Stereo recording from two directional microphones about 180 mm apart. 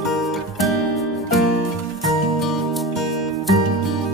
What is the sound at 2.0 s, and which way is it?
Music, centre (ahead or behind).